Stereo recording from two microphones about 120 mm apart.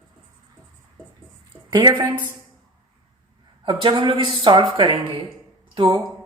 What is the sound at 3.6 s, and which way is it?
Speech, 40° right (ahead or behind).